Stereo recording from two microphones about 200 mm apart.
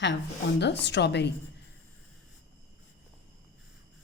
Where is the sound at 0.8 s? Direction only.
60° left (ahead or behind).